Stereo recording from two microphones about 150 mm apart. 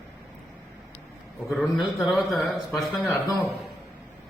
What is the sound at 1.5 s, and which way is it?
Speech, centre (ahead or behind).